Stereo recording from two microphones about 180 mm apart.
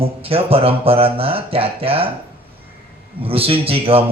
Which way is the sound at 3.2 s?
30° right (ahead or behind).